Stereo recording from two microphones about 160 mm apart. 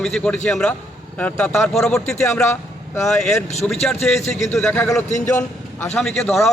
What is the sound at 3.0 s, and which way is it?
A man's voice, 5° left (ahead or behind).